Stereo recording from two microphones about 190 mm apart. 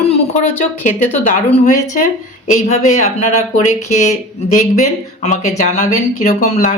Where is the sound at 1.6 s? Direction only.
40° left (ahead or behind).